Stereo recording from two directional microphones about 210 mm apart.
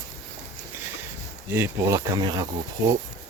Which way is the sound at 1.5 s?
15° right (ahead or behind).